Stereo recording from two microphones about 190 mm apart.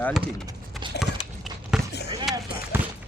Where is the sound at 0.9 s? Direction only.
60° left (ahead or behind).